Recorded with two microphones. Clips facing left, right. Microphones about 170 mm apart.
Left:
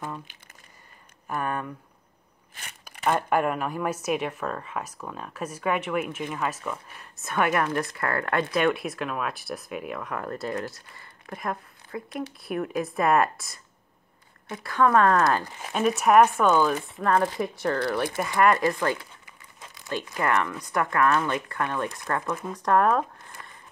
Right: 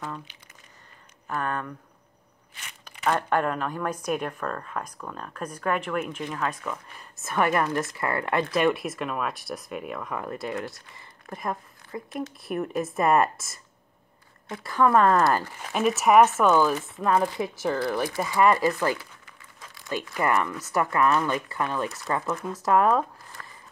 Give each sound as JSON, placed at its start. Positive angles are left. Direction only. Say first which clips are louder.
{"t": 1.2, "sound": "speech", "louder": "even", "side_deg": 10}
{"t": 2.8, "sound": "speech", "louder": "left 1 dB", "side_deg": 5}
{"t": 14.7, "sound": "speech", "louder": "even", "side_deg": -5}
{"t": 20.2, "sound": "speech", "louder": "right 1 dB", "side_deg": -5}
{"t": 23.4, "sound": "a sound", "louder": "right 1 dB", "side_deg": 15}